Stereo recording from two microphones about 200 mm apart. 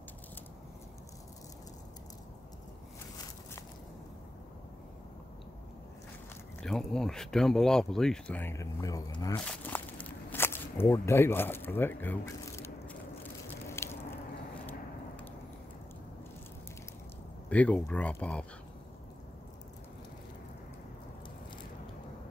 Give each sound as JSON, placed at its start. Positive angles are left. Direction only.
{"t": 6.6, "sound": "speech", "side_deg": 5}
{"t": 9.4, "sound": "walk", "side_deg": 5}
{"t": 17.5, "sound": "speech", "side_deg": 5}